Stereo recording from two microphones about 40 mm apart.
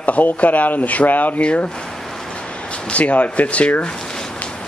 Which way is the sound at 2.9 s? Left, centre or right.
Left.